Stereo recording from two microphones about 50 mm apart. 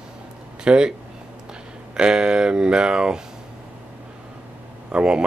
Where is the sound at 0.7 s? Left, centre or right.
Centre.